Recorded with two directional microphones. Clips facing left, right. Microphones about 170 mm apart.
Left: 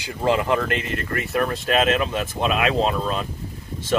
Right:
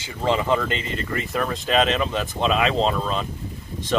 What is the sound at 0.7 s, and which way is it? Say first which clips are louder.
Speech: left 2 dB; 60° left (ahead or behind).